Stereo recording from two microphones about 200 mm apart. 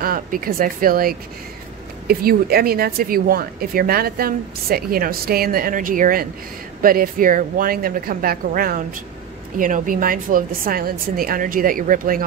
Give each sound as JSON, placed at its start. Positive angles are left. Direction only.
{"t": 0.0, "sound": "speech", "side_deg": -45}